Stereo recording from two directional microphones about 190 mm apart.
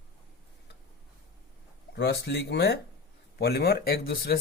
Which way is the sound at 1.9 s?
65° left (ahead or behind).